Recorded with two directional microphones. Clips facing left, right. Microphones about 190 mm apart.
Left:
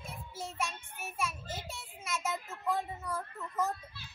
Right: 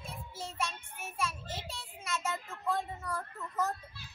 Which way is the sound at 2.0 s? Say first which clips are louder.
Even; 5° left (ahead or behind).